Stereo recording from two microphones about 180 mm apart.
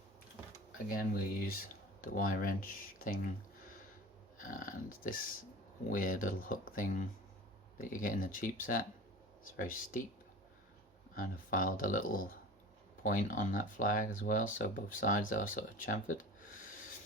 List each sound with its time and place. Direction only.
0.9 s speech: 55° left (ahead or behind)
4.4 s speech: 50° left (ahead or behind)
11.1 s speech: 50° left (ahead or behind)